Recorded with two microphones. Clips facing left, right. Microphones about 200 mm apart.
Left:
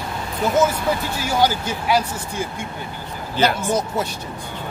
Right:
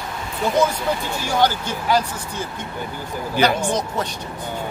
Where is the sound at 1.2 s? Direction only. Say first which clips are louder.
Even; 10° left (ahead or behind).